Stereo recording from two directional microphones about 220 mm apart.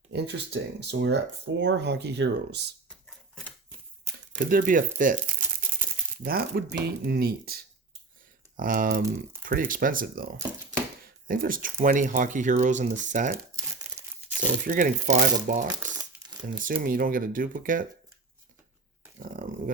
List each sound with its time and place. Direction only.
0.1 s speech: 50° right (ahead or behind)
4.3 s speech: 40° right (ahead or behind)
11.3 s speech: 40° right (ahead or behind)
14.7 s speech: 35° right (ahead or behind)
15.8 s crumpling: 10° right (ahead or behind)
16.4 s speech: 35° right (ahead or behind)
19.2 s a sound: 35° right (ahead or behind)